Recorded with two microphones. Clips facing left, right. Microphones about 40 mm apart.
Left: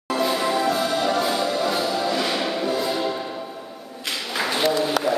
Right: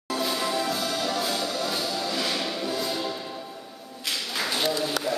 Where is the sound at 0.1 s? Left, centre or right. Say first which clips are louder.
Left 5 dB; centre.